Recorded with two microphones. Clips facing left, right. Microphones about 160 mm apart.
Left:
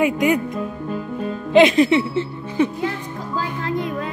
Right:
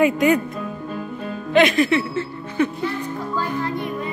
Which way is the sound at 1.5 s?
25° left (ahead or behind).